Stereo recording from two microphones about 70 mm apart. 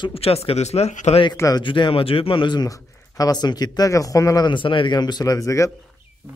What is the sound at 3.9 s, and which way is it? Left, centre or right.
Speech, left.